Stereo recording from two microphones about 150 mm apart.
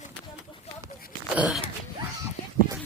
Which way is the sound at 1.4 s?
5° right (ahead or behind).